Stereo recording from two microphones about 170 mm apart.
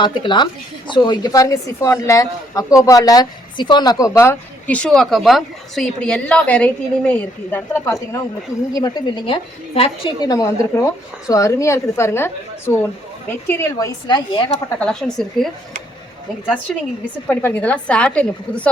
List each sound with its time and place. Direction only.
0.0 s a woman's voice: 25° left (ahead or behind)
8.7 s a woman's voice: 25° left (ahead or behind)
10.2 s a woman's voice: 20° left (ahead or behind)
14.8 s a woman's voice: 5° left (ahead or behind)
16.7 s a woman's voice: 5° left (ahead or behind)